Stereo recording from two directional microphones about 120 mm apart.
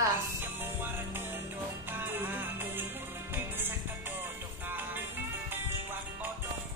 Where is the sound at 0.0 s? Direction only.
15° right (ahead or behind).